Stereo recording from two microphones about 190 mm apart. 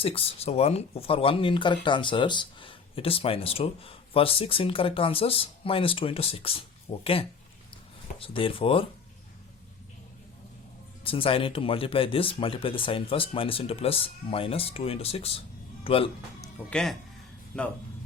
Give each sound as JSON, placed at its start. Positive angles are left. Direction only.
{"t": 0.0, "sound": "speech", "side_deg": 30}
{"t": 11.0, "sound": "a man's voice", "side_deg": 30}
{"t": 16.6, "sound": "speech", "side_deg": 5}